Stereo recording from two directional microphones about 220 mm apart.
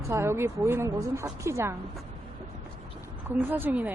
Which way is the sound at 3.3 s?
10° right (ahead or behind).